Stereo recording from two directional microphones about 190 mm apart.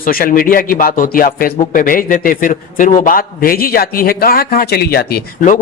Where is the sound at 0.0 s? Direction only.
50° left (ahead or behind).